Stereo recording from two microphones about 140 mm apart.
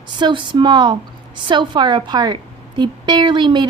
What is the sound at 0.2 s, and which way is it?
Speech, 35° right (ahead or behind).